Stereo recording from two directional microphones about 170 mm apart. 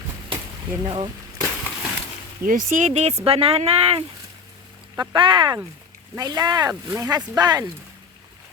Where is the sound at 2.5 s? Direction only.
50° right (ahead or behind); by 7.7 s 20° right (ahead or behind).